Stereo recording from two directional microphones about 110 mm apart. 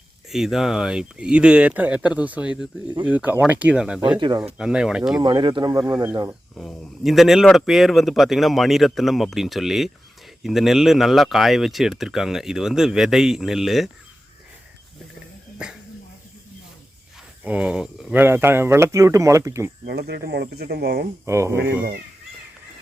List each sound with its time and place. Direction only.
0.3 s speech: 5° right (ahead or behind)
4.2 s speech: 40° right (ahead or behind)
4.5 s speech: 5° right (ahead or behind)
5.2 s speech: 40° right (ahead or behind)
5.8 s speech: 20° right (ahead or behind)
6.5 s speech: 10° left (ahead or behind)
15.6 s speech: 10° right (ahead or behind)
17.4 s speech: 10° right (ahead or behind); by 19.7 s 30° right (ahead or behind)
21.2 s speech: 25° right (ahead or behind)